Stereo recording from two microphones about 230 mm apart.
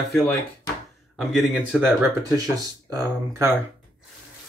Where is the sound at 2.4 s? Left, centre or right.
Centre.